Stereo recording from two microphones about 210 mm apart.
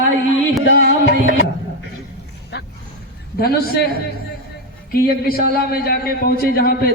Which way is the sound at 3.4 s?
45° left (ahead or behind).